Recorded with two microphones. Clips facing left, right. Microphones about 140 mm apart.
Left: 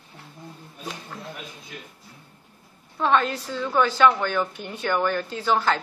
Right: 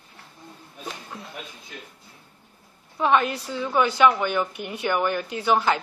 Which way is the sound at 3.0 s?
10° right (ahead or behind).